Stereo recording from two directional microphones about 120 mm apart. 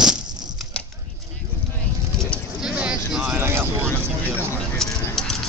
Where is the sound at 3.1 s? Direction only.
10° right (ahead or behind).